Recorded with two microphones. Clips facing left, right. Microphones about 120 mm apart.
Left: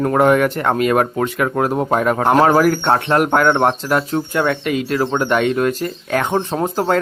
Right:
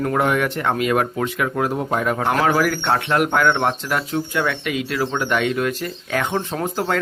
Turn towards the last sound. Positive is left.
turn(degrees=35)  # may be behind; listen again after turning